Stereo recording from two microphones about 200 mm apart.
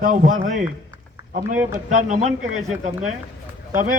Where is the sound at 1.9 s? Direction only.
40° right (ahead or behind).